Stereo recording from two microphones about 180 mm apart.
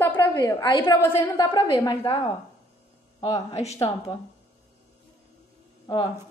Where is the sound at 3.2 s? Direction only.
25° left (ahead or behind).